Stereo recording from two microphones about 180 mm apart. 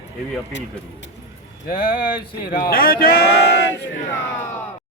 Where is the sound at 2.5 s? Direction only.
55° left (ahead or behind).